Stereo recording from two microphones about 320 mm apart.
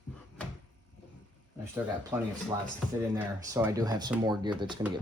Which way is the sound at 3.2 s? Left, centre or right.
Centre.